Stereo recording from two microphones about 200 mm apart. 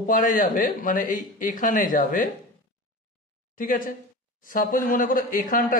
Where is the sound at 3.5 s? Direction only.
40° left (ahead or behind).